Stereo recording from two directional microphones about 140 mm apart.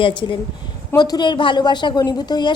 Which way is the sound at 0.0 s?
35° left (ahead or behind).